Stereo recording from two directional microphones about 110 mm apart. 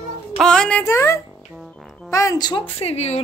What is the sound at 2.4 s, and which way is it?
Speech, 40° left (ahead or behind).